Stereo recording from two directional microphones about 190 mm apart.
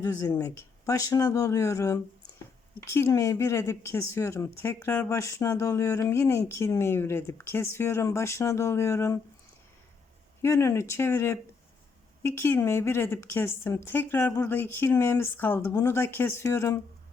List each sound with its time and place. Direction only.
0.0 s speech: 15° left (ahead or behind)
10.4 s speech: 15° left (ahead or behind)